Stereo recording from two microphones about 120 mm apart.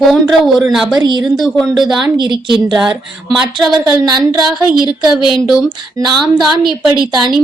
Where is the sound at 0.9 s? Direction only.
40° right (ahead or behind).